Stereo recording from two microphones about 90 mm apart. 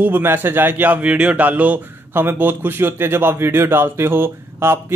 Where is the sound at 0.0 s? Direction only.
25° right (ahead or behind).